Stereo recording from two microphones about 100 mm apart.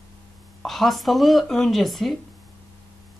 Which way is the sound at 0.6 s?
Centre (ahead or behind).